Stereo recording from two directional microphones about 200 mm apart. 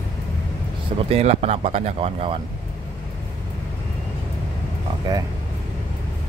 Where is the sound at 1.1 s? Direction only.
30° right (ahead or behind).